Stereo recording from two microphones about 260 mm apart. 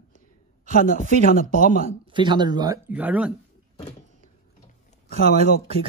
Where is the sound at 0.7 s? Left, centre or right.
Left.